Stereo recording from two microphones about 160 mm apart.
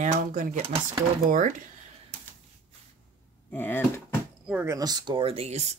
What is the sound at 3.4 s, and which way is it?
Speech, 10° left (ahead or behind).